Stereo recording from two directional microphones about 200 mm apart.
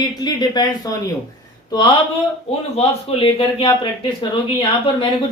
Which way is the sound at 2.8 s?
30° left (ahead or behind).